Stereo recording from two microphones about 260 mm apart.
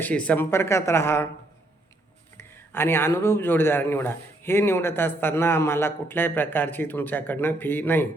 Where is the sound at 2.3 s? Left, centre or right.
Centre.